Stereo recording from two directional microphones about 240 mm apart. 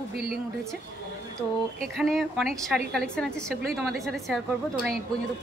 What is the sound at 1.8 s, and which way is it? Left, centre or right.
Speech, centre.